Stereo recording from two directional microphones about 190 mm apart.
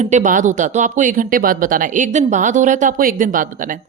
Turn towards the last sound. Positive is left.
turn(degrees=-45)  # may be behind; listen again after turning